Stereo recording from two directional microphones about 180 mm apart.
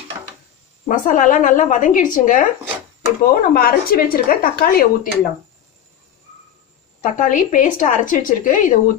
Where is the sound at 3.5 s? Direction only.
55° left (ahead or behind).